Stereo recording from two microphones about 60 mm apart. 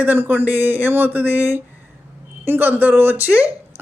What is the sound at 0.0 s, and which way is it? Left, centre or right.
Speech, right.